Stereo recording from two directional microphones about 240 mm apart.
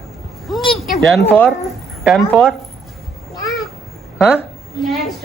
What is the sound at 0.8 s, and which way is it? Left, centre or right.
Speech, centre.